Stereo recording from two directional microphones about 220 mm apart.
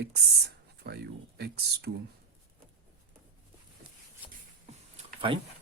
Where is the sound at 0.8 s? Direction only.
45° right (ahead or behind).